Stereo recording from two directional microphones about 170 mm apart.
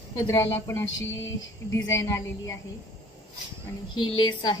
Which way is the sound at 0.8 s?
90° left.